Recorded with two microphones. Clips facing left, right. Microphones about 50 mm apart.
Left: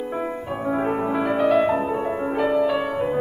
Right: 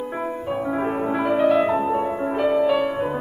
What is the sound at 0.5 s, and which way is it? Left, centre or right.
Music, centre.